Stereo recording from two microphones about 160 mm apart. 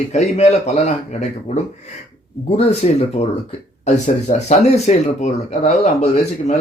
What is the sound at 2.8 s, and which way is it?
Speech, 45° left (ahead or behind).